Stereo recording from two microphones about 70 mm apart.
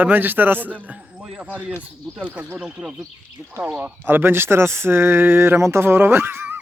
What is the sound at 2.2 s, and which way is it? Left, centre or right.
Speech, right.